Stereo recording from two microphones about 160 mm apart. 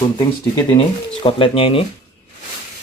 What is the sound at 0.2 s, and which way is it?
Speech, 25° left (ahead or behind).